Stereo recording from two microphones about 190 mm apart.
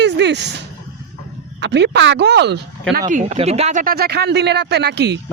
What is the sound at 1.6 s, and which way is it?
Speech, 65° right (ahead or behind).